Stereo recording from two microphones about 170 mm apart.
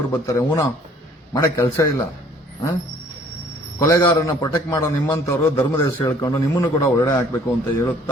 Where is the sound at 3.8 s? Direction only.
20° left (ahead or behind).